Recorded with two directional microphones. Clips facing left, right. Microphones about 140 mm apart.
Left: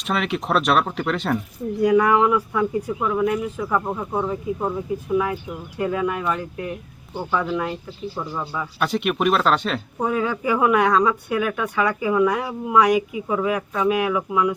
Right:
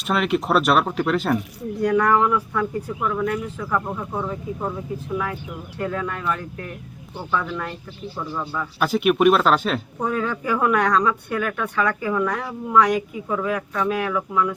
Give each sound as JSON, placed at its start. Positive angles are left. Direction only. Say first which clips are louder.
{"t": 0.1, "sound": "speech", "louder": "right 2 dB", "side_deg": 0}
{"t": 8.8, "sound": "speech", "louder": "right 4 dB", "side_deg": -5}